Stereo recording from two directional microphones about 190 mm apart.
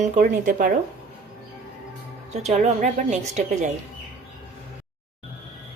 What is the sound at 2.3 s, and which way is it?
A woman's voice, 35° right (ahead or behind).